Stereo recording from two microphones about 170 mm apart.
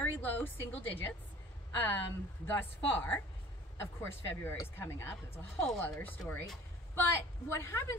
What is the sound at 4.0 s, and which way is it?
A woman's voice, 15° left (ahead or behind).